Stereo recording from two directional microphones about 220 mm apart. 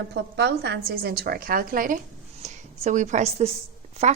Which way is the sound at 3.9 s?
30° right (ahead or behind).